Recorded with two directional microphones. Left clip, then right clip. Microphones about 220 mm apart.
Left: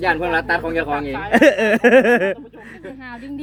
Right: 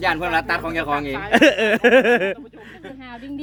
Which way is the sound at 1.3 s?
5° right (ahead or behind).